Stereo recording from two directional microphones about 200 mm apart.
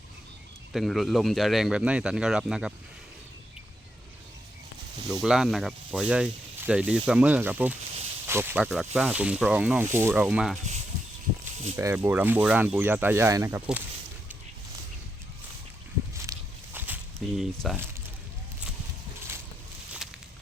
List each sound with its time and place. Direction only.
0.7 s speech: centre (ahead or behind)
5.2 s speech: 5° right (ahead or behind)
11.5 s a sound: 35° right (ahead or behind)
11.8 s speech: 15° right (ahead or behind)
16.3 s walk: 15° right (ahead or behind)
16.7 s a sound: 10° right (ahead or behind)
17.2 s speech: centre (ahead or behind)